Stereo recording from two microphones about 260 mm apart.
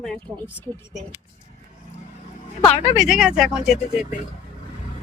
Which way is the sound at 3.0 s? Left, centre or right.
Centre.